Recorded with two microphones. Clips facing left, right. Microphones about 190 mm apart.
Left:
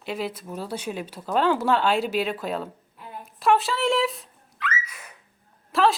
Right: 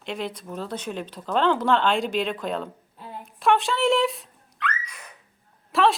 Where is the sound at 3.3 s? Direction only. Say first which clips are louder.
Even; centre (ahead or behind).